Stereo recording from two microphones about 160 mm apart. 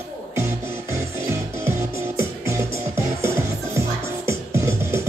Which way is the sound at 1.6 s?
15° right (ahead or behind).